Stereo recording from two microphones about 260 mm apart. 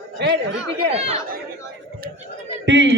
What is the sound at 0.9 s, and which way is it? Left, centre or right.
Speech, right.